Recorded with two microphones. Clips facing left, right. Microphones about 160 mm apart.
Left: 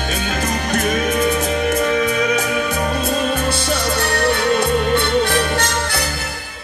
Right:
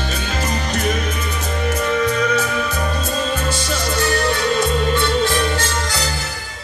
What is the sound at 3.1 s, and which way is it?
Music, 60° left (ahead or behind).